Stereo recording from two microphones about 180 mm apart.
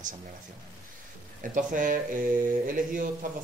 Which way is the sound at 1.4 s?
45° right (ahead or behind).